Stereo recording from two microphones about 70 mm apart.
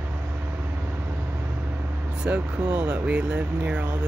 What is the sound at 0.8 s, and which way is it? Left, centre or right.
Vehicle, right.